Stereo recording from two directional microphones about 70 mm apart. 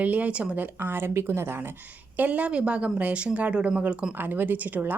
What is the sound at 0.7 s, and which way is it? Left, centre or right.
Speech, right.